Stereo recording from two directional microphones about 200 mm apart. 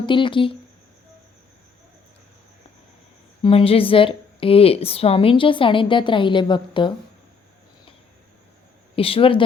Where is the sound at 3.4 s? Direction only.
30° left (ahead or behind).